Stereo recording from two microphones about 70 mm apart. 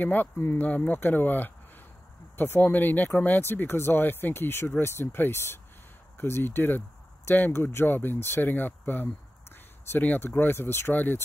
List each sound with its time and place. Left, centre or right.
0.0 s speech: left